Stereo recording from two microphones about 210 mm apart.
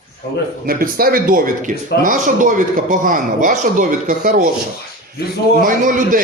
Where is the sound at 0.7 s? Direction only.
45° right (ahead or behind).